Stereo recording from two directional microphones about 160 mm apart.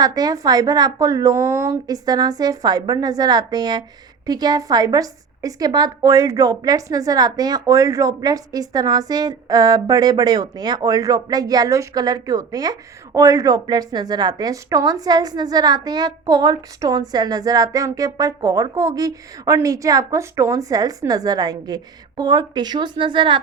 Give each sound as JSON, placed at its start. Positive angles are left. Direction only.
{"t": 0.0, "sound": "a woman's voice", "side_deg": -25}